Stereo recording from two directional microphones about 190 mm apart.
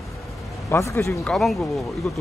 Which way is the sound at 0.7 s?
15° left (ahead or behind).